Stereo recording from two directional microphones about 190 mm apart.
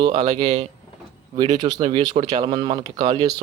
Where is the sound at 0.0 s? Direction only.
25° right (ahead or behind).